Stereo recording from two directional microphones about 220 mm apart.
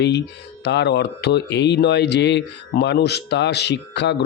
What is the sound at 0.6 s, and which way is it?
Speech, 50° left (ahead or behind).